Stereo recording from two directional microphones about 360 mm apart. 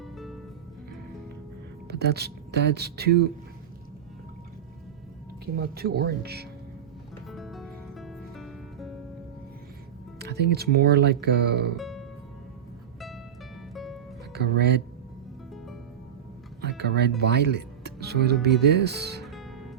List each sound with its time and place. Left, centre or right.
0.0 s music: centre
1.9 s speech: right
5.5 s speech: right
7.3 s music: centre
10.2 s speech: right
11.8 s music: centre
13.7 s music: centre
14.3 s speech: right
16.6 s music: right
18.7 s speech: right
19.2 s music: centre